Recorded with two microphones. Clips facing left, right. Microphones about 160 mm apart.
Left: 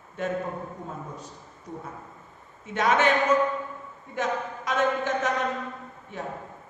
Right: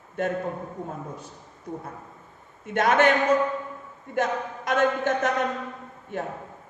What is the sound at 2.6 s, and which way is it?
Speech, 55° right (ahead or behind).